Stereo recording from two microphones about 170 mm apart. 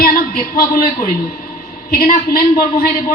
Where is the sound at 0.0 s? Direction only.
60° left (ahead or behind).